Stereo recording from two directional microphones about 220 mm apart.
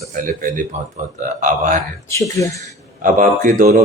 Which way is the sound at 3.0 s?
35° right (ahead or behind).